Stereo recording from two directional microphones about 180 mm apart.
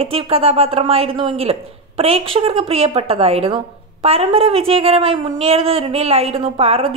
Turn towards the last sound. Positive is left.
turn(degrees=-35)  # may be behind; listen again after turning